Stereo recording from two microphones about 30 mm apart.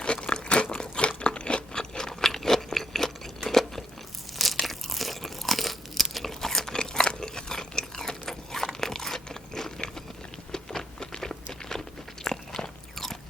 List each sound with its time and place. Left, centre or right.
0.0 s crunch: left; by 6.7 s centre
6.7 s a sound: centre
7.1 s chewing: left
8.2 s crunch: centre
10.5 s a sound: centre
11.7 s crunch: left
12.2 s biting: centre